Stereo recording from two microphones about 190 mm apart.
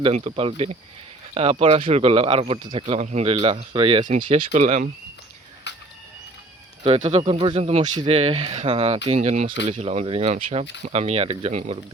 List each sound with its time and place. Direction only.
0.0 s speech: 30° right (ahead or behind)
5.7 s a sound: 65° left (ahead or behind)
6.8 s speech: 30° right (ahead or behind)